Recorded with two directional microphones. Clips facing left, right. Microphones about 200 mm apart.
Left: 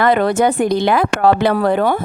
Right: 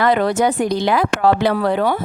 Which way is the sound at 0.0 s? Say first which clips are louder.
Left 2 dB; 55° left (ahead or behind).